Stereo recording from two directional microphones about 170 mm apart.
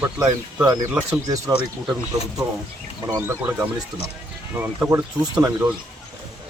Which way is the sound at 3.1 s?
15° right (ahead or behind).